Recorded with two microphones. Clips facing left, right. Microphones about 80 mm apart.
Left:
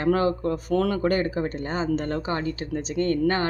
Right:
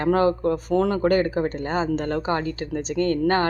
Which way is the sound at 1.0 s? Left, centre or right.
Right.